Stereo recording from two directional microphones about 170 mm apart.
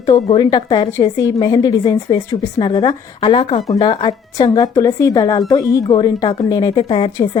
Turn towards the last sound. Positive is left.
turn(degrees=30)  # may be behind; listen again after turning